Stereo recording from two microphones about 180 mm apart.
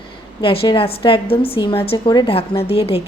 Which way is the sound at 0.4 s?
30° left (ahead or behind).